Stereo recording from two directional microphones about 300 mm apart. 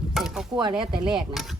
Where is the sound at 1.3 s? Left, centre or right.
Centre.